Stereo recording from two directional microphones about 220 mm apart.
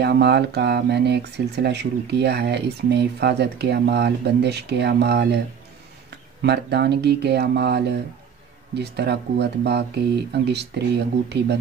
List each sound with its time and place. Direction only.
0.0 s speech: 50° right (ahead or behind)